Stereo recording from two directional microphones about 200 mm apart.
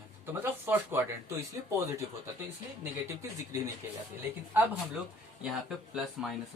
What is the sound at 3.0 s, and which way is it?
Speech, 15° right (ahead or behind).